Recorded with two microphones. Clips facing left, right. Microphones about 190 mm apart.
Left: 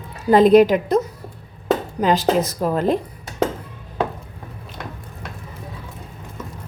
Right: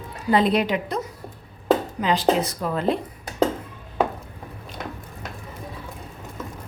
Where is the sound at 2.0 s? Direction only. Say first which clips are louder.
Left 3 dB; 45° left (ahead or behind).